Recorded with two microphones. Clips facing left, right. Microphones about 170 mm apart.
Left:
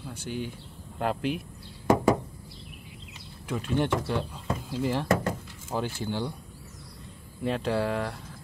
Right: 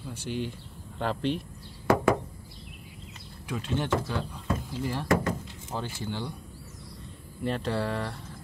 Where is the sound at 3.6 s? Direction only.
60° left (ahead or behind).